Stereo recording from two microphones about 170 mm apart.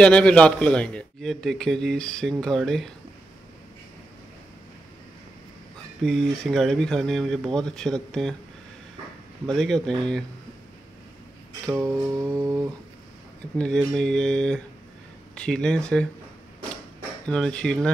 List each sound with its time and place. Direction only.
0.0 s a man's voice: 5° left (ahead or behind)
6.0 s a man's voice: centre (ahead or behind)
9.5 s a man's voice: 5° left (ahead or behind)
11.6 s music: 15° right (ahead or behind)
13.6 s a man's voice: 5° left (ahead or behind)
17.3 s a man's voice: 5° left (ahead or behind)